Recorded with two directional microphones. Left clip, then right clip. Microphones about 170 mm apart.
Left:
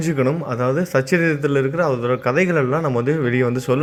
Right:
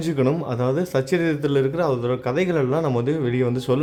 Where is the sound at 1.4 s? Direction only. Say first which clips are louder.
Left 2 dB; 20° right (ahead or behind).